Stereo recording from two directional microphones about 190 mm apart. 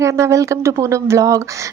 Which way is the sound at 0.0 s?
15° right (ahead or behind).